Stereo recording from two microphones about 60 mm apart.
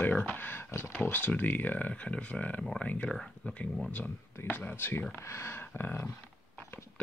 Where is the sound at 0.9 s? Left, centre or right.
Left.